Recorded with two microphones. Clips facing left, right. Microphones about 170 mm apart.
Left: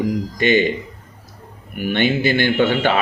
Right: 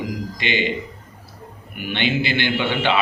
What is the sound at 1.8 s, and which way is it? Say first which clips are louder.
Speech: left 5 dB; 45° left (ahead or behind).